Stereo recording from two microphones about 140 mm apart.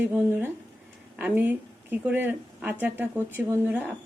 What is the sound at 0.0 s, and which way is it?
Speech, 15° right (ahead or behind).